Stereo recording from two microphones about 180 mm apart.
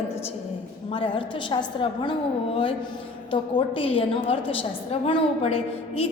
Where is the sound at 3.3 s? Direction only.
30° left (ahead or behind).